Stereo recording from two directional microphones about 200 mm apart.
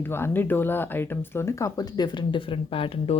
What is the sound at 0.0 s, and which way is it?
Speech, 10° left (ahead or behind).